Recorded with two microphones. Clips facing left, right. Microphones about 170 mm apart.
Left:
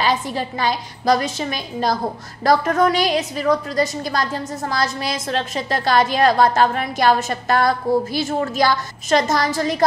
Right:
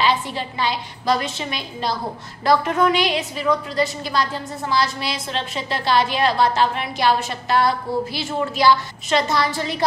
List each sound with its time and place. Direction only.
0.0 s a woman's voice: 45° left (ahead or behind)